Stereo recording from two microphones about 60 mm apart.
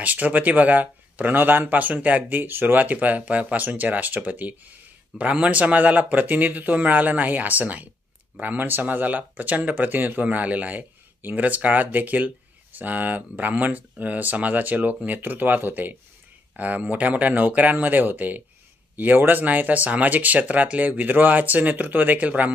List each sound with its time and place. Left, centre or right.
0.0 s speech: right